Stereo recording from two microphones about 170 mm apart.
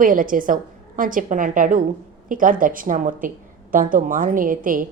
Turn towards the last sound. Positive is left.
turn(degrees=-55)  # may be behind; listen again after turning